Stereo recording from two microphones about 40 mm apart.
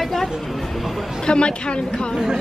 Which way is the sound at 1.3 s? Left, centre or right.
Left.